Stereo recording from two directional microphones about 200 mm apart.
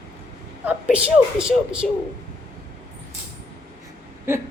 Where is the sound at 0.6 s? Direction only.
10° right (ahead or behind).